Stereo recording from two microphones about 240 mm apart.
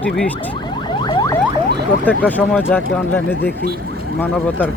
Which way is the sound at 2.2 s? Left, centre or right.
Centre.